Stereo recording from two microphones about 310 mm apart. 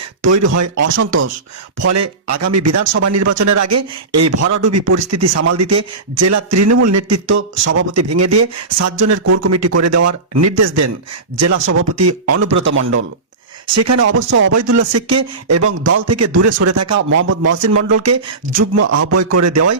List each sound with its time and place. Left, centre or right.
0.3 s a man's voice: right
0.9 s speech: right
1.9 s a man's voice: right
7.3 s a man's voice: right
11.5 s speech: right
12.6 s speech: right
13.7 s a man's voice: right
14.2 s speech: right
14.5 s speech: right